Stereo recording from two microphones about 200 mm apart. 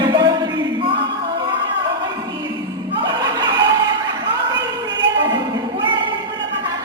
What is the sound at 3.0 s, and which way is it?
Music, 20° right (ahead or behind).